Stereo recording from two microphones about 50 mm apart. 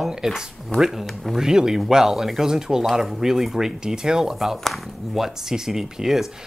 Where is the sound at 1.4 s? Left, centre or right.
Centre.